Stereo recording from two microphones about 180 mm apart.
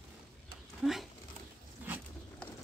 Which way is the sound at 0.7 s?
Centre (ahead or behind).